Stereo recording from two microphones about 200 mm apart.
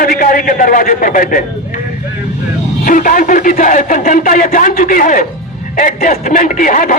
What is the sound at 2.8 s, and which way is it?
A man's voice, 40° left (ahead or behind).